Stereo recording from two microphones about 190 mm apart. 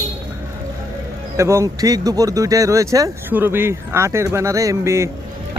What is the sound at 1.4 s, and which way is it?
Speech, 15° right (ahead or behind).